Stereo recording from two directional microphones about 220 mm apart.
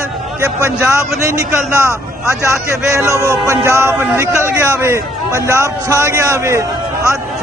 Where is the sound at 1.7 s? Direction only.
10° left (ahead or behind).